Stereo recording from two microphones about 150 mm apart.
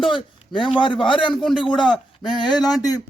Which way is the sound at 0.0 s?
35° left (ahead or behind).